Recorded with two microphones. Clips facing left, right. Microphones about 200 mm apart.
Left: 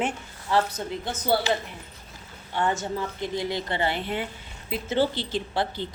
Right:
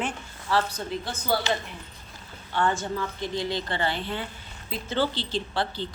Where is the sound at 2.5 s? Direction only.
20° left (ahead or behind).